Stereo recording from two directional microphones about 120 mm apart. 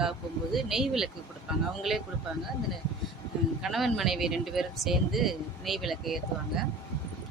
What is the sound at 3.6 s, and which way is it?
Speech, centre (ahead or behind).